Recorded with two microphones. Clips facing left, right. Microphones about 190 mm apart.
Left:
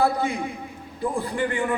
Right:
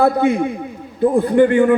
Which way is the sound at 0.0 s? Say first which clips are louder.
Right 8 dB; 60° right (ahead or behind).